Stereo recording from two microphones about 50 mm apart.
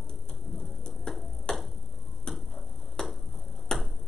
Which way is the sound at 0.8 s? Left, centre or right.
Centre.